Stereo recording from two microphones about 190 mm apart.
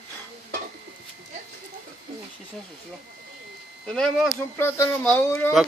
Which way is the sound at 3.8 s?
5° left (ahead or behind).